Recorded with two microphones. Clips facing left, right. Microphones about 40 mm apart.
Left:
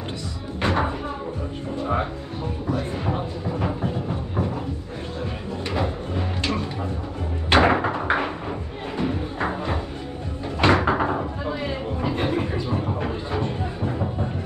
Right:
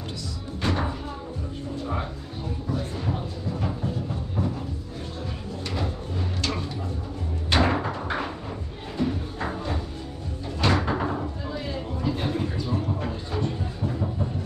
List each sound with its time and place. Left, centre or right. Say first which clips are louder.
0.6 s music: left 4 dB; left
3.1 s music: left 4 dB; left
5.8 s music: left 6 dB; left
7.4 s a sound: left 6 dB; left
8.9 s music: left 1 dB; left
10.6 s door: left 5 dB; left